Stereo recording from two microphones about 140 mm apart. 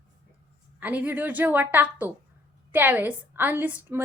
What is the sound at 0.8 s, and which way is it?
A woman's voice, 10° right (ahead or behind).